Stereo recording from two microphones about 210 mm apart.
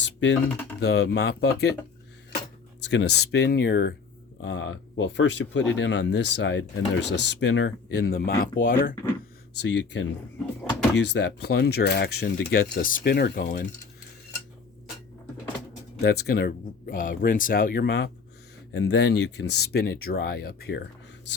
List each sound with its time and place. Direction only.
0.0 s typing: 60° left (ahead or behind)
0.8 s speech: 50° left (ahead or behind)
2.8 s speech: 55° left (ahead or behind)
9.6 s speech: 60° left (ahead or behind)
16.0 s speech: 50° left (ahead or behind)